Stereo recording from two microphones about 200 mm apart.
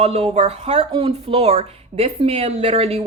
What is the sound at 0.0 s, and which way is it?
Speech, 30° right (ahead or behind).